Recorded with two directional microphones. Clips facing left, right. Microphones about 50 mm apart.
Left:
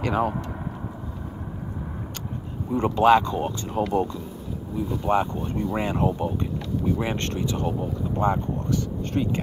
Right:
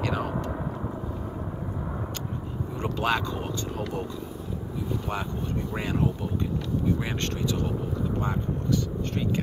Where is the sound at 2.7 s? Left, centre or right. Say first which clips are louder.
Left 10 dB; centre.